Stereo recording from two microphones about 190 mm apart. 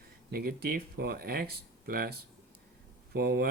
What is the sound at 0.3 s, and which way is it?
Speech, 55° right (ahead or behind).